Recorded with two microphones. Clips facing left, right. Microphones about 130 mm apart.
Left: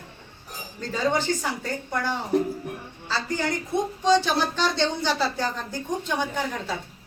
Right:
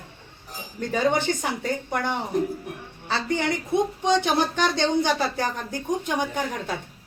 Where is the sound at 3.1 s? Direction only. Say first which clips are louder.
Right 2 dB; 60° right (ahead or behind).